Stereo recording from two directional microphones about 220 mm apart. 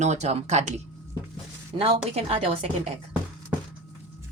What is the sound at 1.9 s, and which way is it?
Speech, 30° right (ahead or behind).